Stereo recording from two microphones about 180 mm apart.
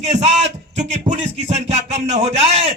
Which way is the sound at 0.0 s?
40° right (ahead or behind).